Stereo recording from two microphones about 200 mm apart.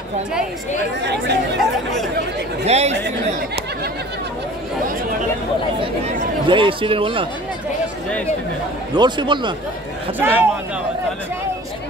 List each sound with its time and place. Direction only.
1.0 s speech: 60° right (ahead or behind)
2.6 s speech: 30° right (ahead or behind)
6.4 s speech: 25° right (ahead or behind)
8.9 s speech: 20° right (ahead or behind)
10.1 s speech: 10° right (ahead or behind)